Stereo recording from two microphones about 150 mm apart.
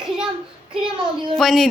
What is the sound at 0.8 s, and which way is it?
Speech, 30° right (ahead or behind).